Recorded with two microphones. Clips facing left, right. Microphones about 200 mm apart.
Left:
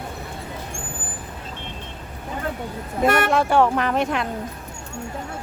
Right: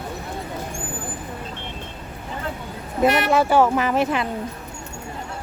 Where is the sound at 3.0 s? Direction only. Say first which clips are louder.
Even; 50° left (ahead or behind).